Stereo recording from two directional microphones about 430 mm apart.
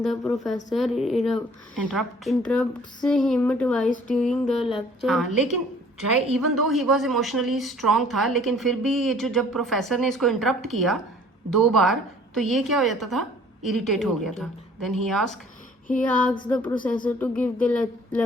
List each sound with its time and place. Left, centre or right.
0.0 s a woman's voice: centre
6.3 s a woman's voice: centre